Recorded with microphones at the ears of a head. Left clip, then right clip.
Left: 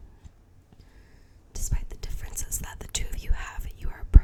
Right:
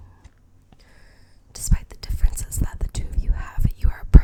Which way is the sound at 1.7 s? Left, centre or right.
Right.